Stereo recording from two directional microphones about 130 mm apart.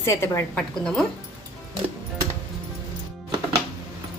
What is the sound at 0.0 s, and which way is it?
Speech, 20° left (ahead or behind).